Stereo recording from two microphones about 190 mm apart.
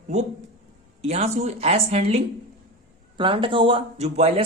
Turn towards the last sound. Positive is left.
turn(degrees=-35)  # may be behind; listen again after turning